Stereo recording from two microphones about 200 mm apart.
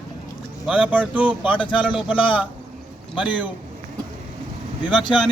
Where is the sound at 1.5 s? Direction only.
25° left (ahead or behind).